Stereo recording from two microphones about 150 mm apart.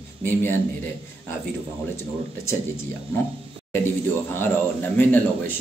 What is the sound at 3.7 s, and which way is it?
Speech, 15° left (ahead or behind).